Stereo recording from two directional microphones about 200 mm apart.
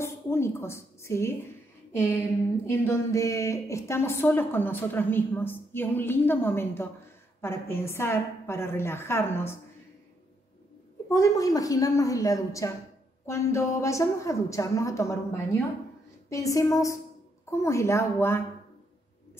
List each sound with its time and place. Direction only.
0.0 s a sound: 10° left (ahead or behind)
2.6 s a woman's voice: 10° left (ahead or behind)
11.1 s a woman's voice: 15° left (ahead or behind)